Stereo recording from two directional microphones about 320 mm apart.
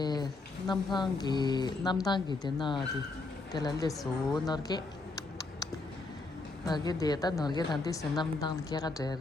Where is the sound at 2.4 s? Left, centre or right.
Centre.